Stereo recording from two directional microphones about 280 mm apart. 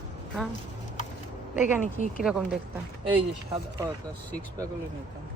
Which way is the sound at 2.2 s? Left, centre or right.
Centre.